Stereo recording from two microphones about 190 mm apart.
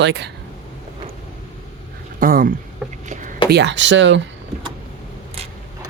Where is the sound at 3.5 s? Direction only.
70° right (ahead or behind).